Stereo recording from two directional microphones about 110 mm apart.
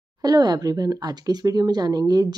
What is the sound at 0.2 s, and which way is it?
Speech, 35° right (ahead or behind).